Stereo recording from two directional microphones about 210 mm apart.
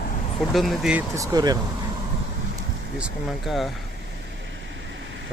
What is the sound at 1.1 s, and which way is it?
Speech, 15° right (ahead or behind).